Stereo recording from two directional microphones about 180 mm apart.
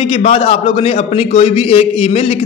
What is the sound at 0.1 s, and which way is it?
A man's voice, 35° left (ahead or behind).